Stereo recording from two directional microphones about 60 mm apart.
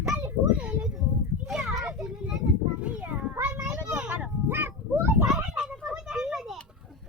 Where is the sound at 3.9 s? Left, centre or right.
Right.